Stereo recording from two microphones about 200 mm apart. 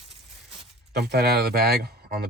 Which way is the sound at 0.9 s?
55° right (ahead or behind).